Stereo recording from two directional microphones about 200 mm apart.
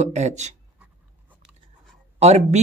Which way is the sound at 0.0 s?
35° right (ahead or behind).